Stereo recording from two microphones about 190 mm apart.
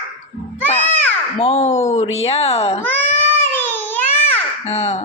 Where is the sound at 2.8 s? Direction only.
10° left (ahead or behind).